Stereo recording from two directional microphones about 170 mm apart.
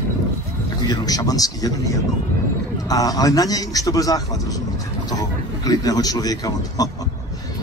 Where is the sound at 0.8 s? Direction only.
20° left (ahead or behind).